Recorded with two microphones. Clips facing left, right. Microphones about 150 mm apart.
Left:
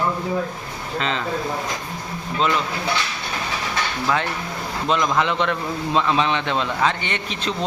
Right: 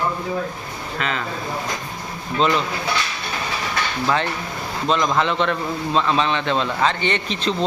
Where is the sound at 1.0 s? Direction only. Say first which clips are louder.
Left 1 dB; 25° left (ahead or behind).